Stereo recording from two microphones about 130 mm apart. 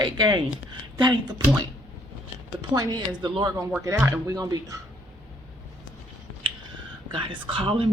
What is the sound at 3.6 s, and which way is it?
Speech, 10° right (ahead or behind).